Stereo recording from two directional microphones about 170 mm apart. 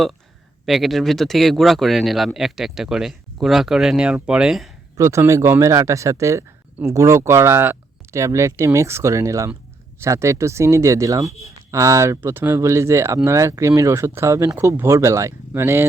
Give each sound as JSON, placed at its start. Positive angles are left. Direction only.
{"t": 0.6, "sound": "speech", "side_deg": 0}
{"t": 4.9, "sound": "speech", "side_deg": -15}